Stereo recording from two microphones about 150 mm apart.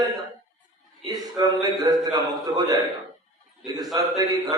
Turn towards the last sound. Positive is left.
turn(degrees=-25)  # may be behind; listen again after turning